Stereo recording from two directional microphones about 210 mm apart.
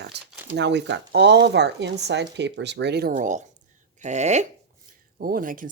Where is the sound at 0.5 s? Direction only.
55° right (ahead or behind).